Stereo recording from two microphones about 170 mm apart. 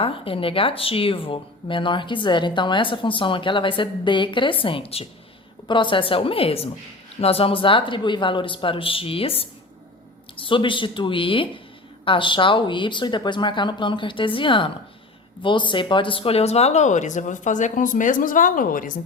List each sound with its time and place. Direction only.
0.0 s speech: 30° left (ahead or behind); by 18.9 s 55° left (ahead or behind)